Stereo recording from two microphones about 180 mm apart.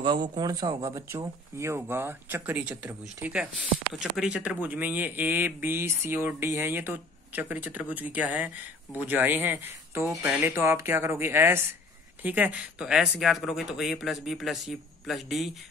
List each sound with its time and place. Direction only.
0.0 s speech: 25° right (ahead or behind); by 15.5 s centre (ahead or behind)